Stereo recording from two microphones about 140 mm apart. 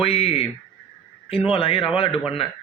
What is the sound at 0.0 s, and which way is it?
Speech, 45° left (ahead or behind).